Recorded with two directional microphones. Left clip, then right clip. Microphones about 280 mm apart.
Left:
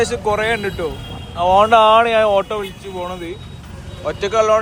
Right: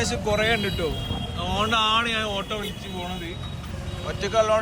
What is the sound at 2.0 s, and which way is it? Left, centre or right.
Speech, centre.